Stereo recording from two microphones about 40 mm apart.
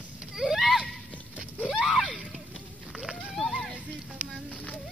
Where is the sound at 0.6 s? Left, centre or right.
Centre.